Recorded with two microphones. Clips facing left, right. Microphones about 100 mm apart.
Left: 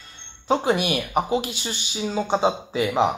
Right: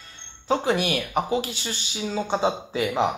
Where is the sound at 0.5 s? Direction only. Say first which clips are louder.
Left 2 dB; 15° left (ahead or behind).